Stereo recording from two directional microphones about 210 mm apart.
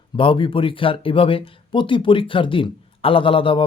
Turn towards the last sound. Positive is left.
turn(degrees=25)  # may be behind; listen again after turning